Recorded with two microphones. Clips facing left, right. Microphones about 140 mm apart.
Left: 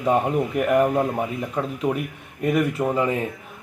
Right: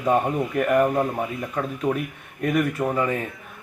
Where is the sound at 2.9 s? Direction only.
20° left (ahead or behind).